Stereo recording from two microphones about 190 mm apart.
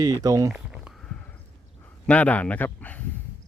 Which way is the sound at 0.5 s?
Centre (ahead or behind).